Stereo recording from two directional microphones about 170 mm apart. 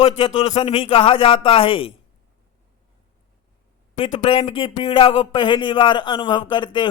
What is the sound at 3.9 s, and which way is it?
Speech, 30° left (ahead or behind).